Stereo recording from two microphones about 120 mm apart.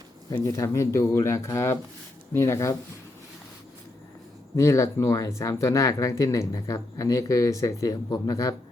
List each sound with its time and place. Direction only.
0.3 s speech: 25° left (ahead or behind)
4.5 s speech: 25° left (ahead or behind)